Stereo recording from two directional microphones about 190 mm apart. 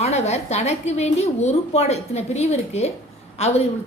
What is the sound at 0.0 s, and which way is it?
A woman's voice, 35° left (ahead or behind).